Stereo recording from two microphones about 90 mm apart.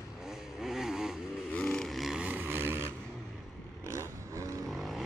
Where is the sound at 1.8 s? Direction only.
Centre (ahead or behind).